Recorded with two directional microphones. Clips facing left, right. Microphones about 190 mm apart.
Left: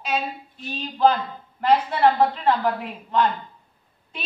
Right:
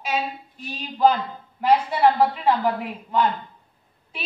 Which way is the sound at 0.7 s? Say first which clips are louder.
Even; 10° right (ahead or behind).